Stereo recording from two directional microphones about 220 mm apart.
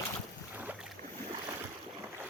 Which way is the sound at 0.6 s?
5° right (ahead or behind).